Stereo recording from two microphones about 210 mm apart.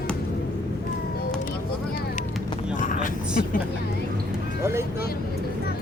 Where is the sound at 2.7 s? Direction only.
35° left (ahead or behind).